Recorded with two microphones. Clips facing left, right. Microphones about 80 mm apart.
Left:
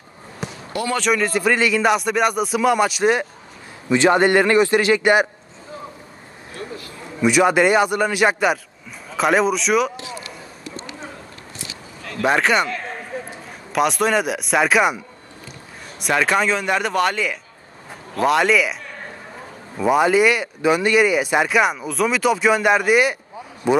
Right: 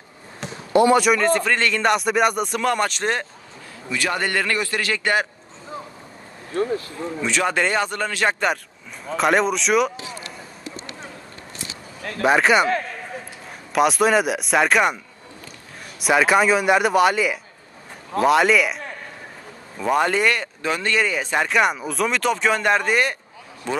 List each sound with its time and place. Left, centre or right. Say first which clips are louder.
0.4 s basketball bounce: left 2 dB; centre
0.9 s a man's voice: right 3 dB; centre
1.2 s speech: left 1 dB; centre
3.9 s a man's voice: left 9 dB; left
7.2 s speech: left 7 dB; centre
12.2 s speech: right 1 dB; centre
13.1 s a sound: left 5 dB; left
13.7 s speech: right 1 dB; centre
16.0 s a man's voice: right 2 dB; centre
19.8 s speech: left 4 dB; centre